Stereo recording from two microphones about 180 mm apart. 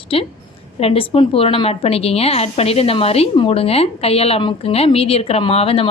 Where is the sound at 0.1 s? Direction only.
30° left (ahead or behind).